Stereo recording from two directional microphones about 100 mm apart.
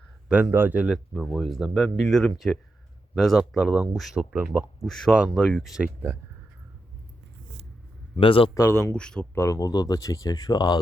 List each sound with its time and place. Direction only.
0.3 s speech: 10° right (ahead or behind)
0.9 s speech: centre (ahead or behind)
5.1 s speech: 10° right (ahead or behind)
8.2 s a man's voice: 60° left (ahead or behind)
8.5 s speech: 30° left (ahead or behind)
9.0 s speech: 10° left (ahead or behind)
9.3 s speech: 30° left (ahead or behind)